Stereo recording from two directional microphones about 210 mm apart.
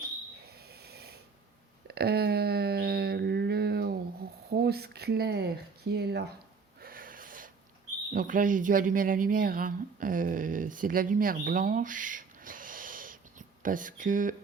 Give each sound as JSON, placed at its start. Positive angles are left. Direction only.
{"t": 0.7, "sound": "snoring", "side_deg": -50}
{"t": 1.9, "sound": "a sound", "side_deg": -50}
{"t": 8.1, "sound": "speech", "side_deg": -40}